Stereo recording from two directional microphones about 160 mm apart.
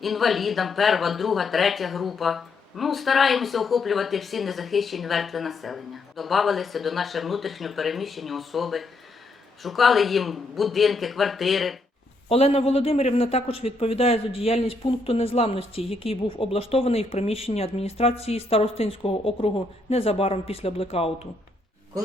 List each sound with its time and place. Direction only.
0.0 s speech: centre (ahead or behind)
12.3 s a man's voice: 40° left (ahead or behind)